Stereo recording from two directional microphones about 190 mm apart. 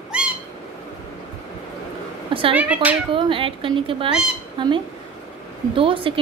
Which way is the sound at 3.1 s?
25° right (ahead or behind).